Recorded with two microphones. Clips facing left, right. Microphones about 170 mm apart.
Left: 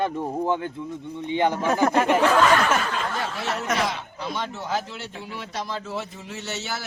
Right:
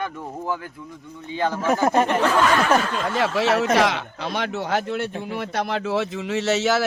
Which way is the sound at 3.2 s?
90° right.